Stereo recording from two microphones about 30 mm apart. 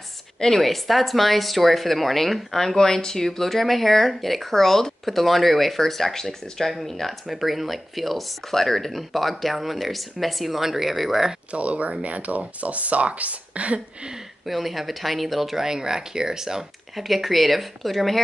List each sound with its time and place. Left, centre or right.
0.6 s a woman's voice: centre
5.0 s a woman's voice: centre
11.5 s speech: right
14.4 s a woman's voice: centre
15.6 s speech: centre
16.9 s a woman's voice: centre